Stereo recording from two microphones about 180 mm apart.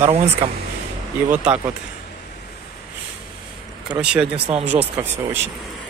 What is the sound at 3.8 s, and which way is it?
Speech, 5° right (ahead or behind).